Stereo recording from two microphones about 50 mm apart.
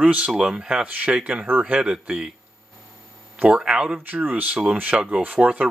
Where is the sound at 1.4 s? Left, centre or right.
Right.